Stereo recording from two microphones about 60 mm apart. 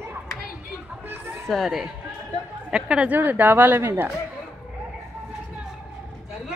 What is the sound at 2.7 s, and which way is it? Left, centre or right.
Speech, centre.